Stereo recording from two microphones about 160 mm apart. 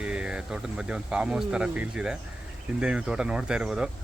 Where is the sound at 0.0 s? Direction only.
5° right (ahead or behind).